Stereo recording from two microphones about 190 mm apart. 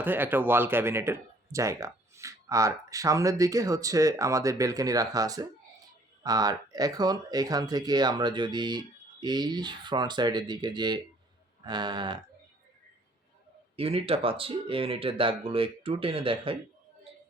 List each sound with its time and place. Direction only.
0.0 s speech: 10° right (ahead or behind)
13.7 s speech: 30° right (ahead or behind)